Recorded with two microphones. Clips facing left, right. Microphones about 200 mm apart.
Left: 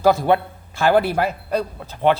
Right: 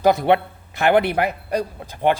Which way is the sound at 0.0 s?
20° right (ahead or behind).